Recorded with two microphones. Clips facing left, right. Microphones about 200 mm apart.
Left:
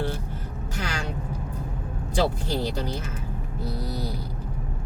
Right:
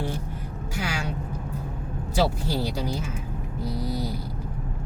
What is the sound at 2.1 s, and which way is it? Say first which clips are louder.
Speech: even; 5° right (ahead or behind).